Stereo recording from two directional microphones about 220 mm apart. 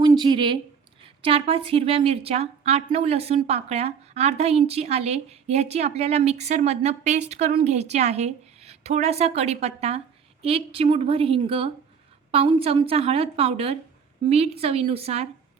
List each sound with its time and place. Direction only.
0.0 s speech: 20° right (ahead or behind)